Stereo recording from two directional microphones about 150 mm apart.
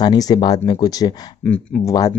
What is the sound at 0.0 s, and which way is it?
Speech, 25° left (ahead or behind).